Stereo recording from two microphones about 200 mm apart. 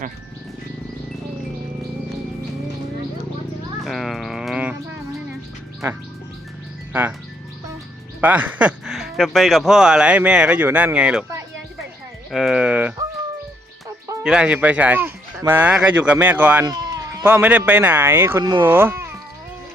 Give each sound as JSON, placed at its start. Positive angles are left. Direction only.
{"t": 3.8, "sound": "music", "side_deg": 0}
{"t": 8.2, "sound": "speech", "side_deg": -10}
{"t": 12.3, "sound": "a sound", "side_deg": 0}
{"t": 14.3, "sound": "speech", "side_deg": -5}
{"t": 16.6, "sound": "sheep", "side_deg": -20}
{"t": 17.2, "sound": "speech", "side_deg": -10}